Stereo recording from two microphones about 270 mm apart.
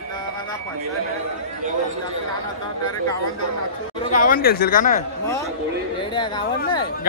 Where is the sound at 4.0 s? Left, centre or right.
Left.